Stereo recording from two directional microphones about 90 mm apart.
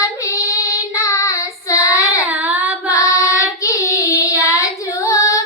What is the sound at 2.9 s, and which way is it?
Child singing, 35° left (ahead or behind).